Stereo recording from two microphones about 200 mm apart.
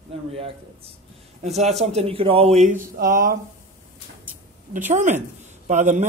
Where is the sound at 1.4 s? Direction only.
35° right (ahead or behind).